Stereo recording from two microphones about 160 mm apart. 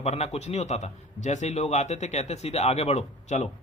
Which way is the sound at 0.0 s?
40° left (ahead or behind).